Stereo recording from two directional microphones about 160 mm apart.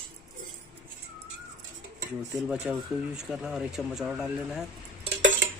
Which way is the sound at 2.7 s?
10° right (ahead or behind).